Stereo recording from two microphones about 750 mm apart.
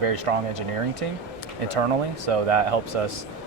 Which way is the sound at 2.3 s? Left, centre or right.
Right.